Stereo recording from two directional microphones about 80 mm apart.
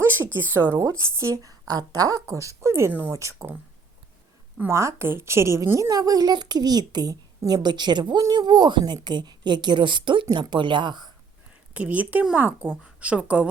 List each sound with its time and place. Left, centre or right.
0.0 s a sound: right
0.8 s a woman's voice: right
4.7 s a woman's voice: right
5.9 s a woman's voice: right
9.0 s speech: right
10.5 s speech: right
11.7 s a woman's voice: centre